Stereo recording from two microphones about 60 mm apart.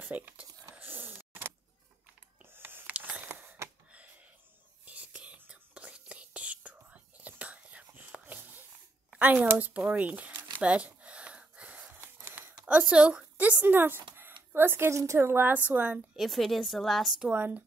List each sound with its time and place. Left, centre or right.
0.0 s speech: right
0.7 s a sound: right
2.5 s a sound: right
3.9 s a sound: right
4.8 s whispering: right
9.2 s speech: right
9.9 s crumpling: right
10.6 s gasp: centre
11.9 s a sound: right
12.6 s a woman's voice: right
13.7 s a woman's voice: right
16.2 s a woman's voice: centre
17.3 s speech: right